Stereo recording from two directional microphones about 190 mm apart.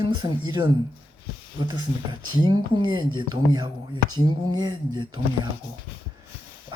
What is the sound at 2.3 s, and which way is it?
Speech, 25° right (ahead or behind).